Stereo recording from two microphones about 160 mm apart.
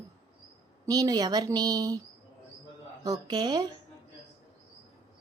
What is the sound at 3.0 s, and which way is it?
Speech, 25° right (ahead or behind).